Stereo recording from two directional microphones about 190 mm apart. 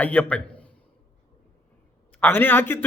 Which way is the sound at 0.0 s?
5° left (ahead or behind).